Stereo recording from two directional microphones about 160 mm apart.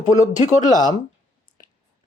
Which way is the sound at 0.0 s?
50° left (ahead or behind).